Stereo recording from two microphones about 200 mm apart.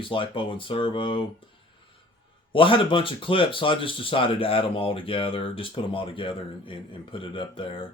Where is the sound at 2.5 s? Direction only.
25° left (ahead or behind).